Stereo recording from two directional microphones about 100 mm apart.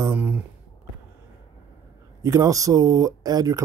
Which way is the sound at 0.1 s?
15° right (ahead or behind).